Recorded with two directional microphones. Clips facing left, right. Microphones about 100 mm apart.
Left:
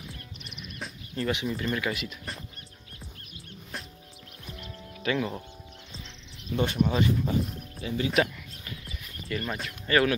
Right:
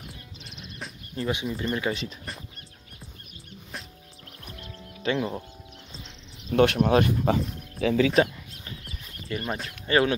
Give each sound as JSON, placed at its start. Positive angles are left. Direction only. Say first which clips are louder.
{"t": 1.1, "sound": "speech", "louder": "even", "side_deg": -20}
{"t": 4.5, "sound": "music", "louder": "left 1 dB", "side_deg": 20}
{"t": 5.0, "sound": "speech", "louder": "right 2 dB", "side_deg": -30}
{"t": 6.5, "sound": "speech", "louder": "right 8 dB", "side_deg": -75}
{"t": 6.8, "sound": "speech", "louder": "right 4 dB", "side_deg": -65}
{"t": 7.8, "sound": "speech", "louder": "right 12 dB", "side_deg": 0}
{"t": 8.1, "sound": "a sound", "louder": "right 4 dB", "side_deg": -35}
{"t": 9.7, "sound": "speech", "louder": "right 1 dB", "side_deg": -25}